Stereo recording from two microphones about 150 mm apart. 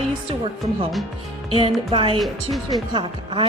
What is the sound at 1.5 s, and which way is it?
Speech, 40° right (ahead or behind).